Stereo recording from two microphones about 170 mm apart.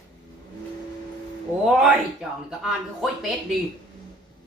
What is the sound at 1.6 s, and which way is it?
Speech, centre (ahead or behind).